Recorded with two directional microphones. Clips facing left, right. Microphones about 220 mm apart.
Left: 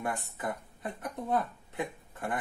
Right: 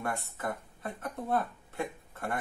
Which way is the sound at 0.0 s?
15° left (ahead or behind).